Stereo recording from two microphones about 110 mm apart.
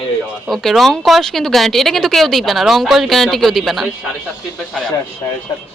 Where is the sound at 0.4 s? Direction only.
Centre (ahead or behind).